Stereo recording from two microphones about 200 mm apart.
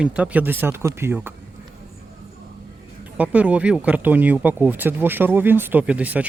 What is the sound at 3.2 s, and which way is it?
Speech, 5° right (ahead or behind).